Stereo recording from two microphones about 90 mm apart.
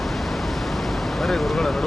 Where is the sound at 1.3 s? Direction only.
Centre (ahead or behind).